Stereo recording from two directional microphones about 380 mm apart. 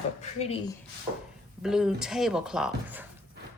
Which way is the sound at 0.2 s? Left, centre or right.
Centre.